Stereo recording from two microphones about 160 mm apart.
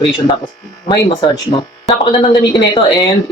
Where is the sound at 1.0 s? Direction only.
25° left (ahead or behind).